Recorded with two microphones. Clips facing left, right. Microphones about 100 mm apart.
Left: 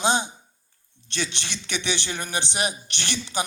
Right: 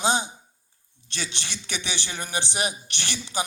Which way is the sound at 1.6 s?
60° left (ahead or behind).